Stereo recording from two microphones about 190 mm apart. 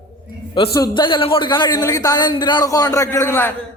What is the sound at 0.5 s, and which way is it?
A man's voice, 25° left (ahead or behind).